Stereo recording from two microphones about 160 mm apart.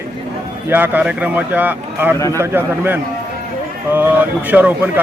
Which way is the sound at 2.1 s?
20° left (ahead or behind).